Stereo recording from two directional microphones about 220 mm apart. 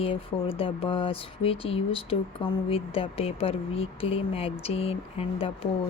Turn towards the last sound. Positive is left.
turn(degrees=25)  # may be behind; listen again after turning